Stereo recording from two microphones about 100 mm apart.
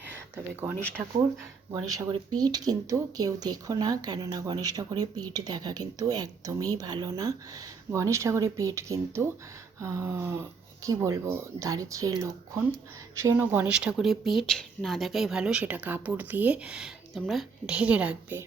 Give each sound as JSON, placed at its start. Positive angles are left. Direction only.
{"t": 1.0, "sound": "speech", "side_deg": -20}
{"t": 1.7, "sound": "speech", "side_deg": -35}
{"t": 13.1, "sound": "speech", "side_deg": -25}
{"t": 17.7, "sound": "a woman's voice", "side_deg": -10}